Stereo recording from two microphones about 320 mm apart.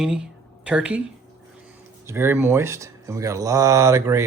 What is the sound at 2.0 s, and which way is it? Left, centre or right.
Speech, centre.